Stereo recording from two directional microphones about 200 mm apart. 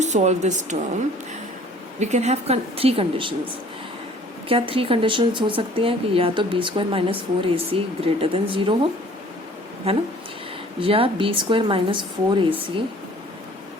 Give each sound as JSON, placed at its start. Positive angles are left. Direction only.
{"t": 0.0, "sound": "a woman's voice", "side_deg": -35}
{"t": 2.0, "sound": "a woman's voice", "side_deg": -35}
{"t": 4.4, "sound": "a woman's voice", "side_deg": -25}